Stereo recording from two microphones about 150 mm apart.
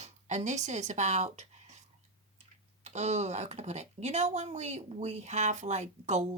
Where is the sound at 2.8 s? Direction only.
50° right (ahead or behind).